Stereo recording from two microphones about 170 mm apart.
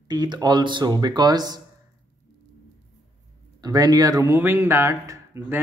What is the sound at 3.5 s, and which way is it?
Speech, 25° right (ahead or behind).